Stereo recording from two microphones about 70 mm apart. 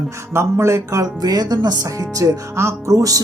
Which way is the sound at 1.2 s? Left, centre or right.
Right.